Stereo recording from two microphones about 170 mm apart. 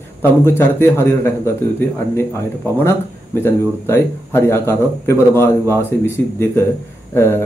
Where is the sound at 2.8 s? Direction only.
15° left (ahead or behind).